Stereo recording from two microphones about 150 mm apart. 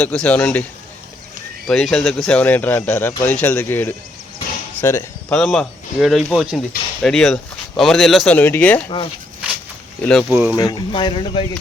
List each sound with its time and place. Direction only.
0.0 s speech: 10° left (ahead or behind)
1.6 s speech: 5° left (ahead or behind)
5.4 s speech: centre (ahead or behind)
10.0 s speech: 5° left (ahead or behind)
10.5 s speech: 25° left (ahead or behind)